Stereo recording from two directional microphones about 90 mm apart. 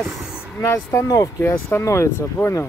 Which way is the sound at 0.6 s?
35° left (ahead or behind).